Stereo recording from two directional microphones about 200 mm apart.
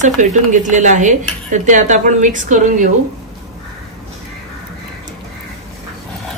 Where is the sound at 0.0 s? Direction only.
40° right (ahead or behind).